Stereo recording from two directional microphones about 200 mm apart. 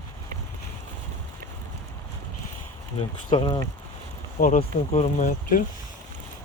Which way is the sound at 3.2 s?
25° left (ahead or behind).